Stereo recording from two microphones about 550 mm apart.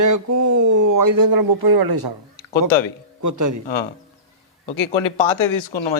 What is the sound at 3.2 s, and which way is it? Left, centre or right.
Speech, right.